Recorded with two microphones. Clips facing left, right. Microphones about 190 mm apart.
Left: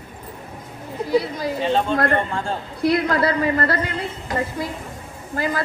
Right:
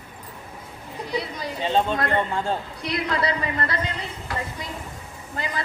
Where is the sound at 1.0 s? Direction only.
Centre (ahead or behind).